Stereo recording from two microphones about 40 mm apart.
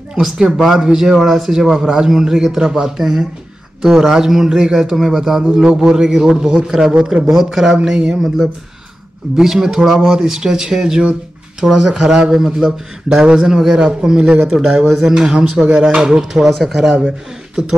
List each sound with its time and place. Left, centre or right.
0.2 s a man's voice: centre
7.2 s a man's voice: centre
9.4 s a man's voice: centre
9.9 s a man's voice: centre
12.1 s a man's voice: right; by 16.9 s centre